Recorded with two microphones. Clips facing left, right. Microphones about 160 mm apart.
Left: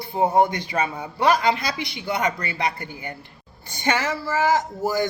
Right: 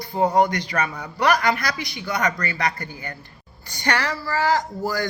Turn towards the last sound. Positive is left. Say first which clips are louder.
# left 2 dB
turn(degrees=20)  # may be behind; listen again after turning